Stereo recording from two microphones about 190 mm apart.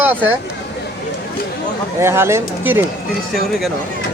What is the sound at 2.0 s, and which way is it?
Speech, 15° right (ahead or behind).